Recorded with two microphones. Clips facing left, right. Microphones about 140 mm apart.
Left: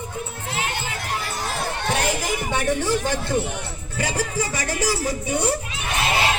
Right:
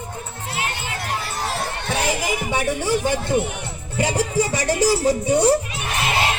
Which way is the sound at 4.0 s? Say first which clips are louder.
Right 5 dB; 25° right (ahead or behind).